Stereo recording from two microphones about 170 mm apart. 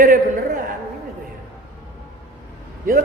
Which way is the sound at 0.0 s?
55° right (ahead or behind).